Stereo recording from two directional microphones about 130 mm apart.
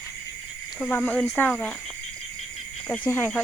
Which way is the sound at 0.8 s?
10° left (ahead or behind).